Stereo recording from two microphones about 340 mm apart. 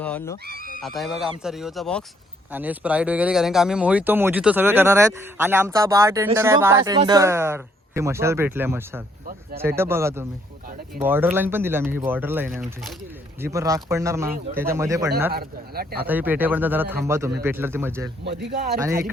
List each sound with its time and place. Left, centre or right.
0.0 s speech: centre
15.3 s speech: right
16.0 s speech: centre